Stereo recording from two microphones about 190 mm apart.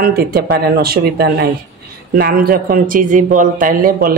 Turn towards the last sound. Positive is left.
turn(degrees=-50)  # may be behind; listen again after turning